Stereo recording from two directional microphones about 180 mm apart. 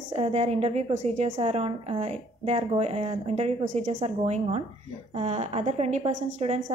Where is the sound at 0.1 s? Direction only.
35° right (ahead or behind).